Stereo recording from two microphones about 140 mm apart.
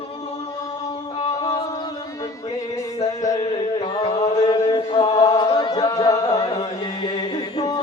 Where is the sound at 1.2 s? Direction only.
35° left (ahead or behind).